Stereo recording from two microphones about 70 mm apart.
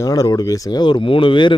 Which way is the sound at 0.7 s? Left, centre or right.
Left.